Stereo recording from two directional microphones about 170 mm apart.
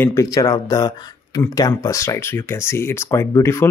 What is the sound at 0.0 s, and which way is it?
Speech, 20° left (ahead or behind).